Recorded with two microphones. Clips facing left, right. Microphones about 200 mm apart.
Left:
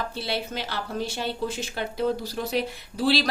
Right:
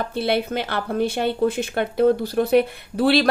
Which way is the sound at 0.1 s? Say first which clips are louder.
Right 8 dB; 55° right (ahead or behind).